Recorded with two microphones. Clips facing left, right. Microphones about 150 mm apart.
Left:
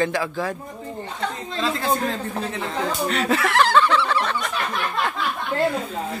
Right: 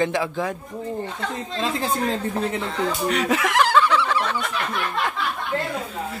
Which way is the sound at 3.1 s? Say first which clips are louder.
Left 1 dB; 10° right (ahead or behind).